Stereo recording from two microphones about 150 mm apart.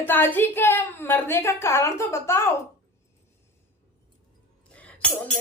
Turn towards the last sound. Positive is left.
turn(degrees=10)  # may be behind; listen again after turning